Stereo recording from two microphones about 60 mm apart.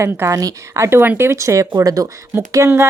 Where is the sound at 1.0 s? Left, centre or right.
Right.